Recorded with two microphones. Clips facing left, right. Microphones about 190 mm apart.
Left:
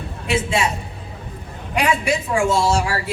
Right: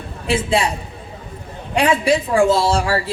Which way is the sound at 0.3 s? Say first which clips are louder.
Right 2 dB; 30° right (ahead or behind).